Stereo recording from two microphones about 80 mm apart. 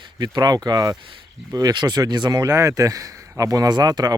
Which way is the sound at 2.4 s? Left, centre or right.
Right.